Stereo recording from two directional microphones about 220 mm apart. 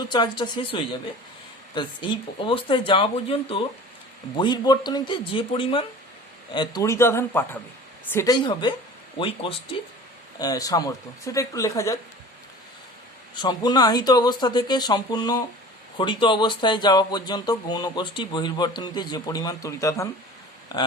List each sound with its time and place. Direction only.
0.1 s speech: 20° left (ahead or behind)
13.3 s speech: 20° left (ahead or behind)